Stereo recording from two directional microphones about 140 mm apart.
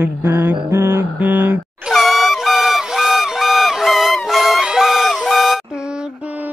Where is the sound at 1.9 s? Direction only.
Centre (ahead or behind).